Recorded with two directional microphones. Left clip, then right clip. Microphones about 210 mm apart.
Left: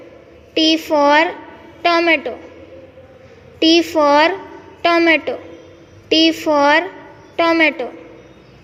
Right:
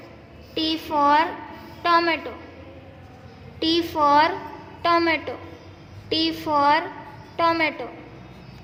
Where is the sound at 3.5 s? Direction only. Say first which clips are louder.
Left 9 dB; 20° left (ahead or behind).